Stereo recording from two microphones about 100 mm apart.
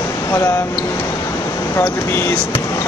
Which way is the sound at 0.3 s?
25° left (ahead or behind).